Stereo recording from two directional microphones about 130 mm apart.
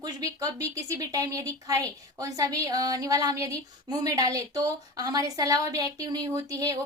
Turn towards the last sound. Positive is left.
turn(degrees=-25)  # may be behind; listen again after turning